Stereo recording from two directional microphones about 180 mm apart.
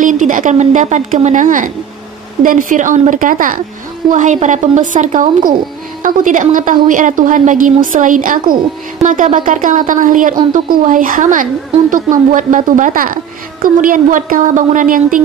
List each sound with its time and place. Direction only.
0.0 s a woman's voice: 45° right (ahead or behind)